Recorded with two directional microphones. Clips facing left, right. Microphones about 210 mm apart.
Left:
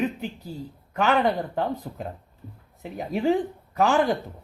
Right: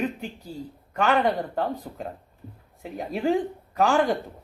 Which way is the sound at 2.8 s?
Centre (ahead or behind).